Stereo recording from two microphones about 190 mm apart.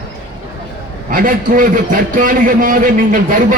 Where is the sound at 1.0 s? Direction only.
45° right (ahead or behind).